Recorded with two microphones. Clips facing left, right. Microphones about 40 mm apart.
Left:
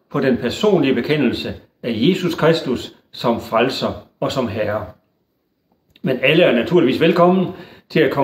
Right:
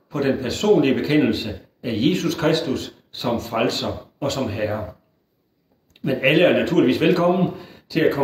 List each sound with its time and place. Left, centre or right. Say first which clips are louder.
0.1 s speech: left 4 dB; left
5.9 s speech: left 3 dB; left
6.4 s speech: left 3 dB; centre
6.9 s speech: left 4 dB; left